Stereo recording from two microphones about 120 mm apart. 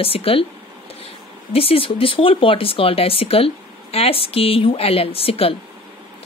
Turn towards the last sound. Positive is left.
turn(degrees=50)  # may be behind; listen again after turning